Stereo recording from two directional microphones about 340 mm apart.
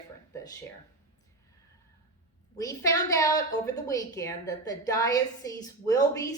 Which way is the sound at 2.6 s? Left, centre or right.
Centre.